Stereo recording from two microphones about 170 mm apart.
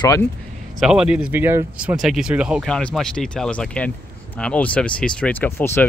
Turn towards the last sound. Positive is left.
turn(degrees=10)  # may be behind; listen again after turning